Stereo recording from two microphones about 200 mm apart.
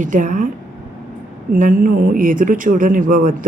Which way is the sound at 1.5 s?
40° right (ahead or behind).